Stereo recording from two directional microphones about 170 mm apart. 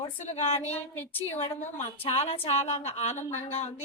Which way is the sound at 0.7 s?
10° left (ahead or behind).